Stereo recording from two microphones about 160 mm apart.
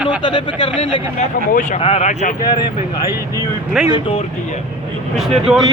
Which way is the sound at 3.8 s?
5° right (ahead or behind).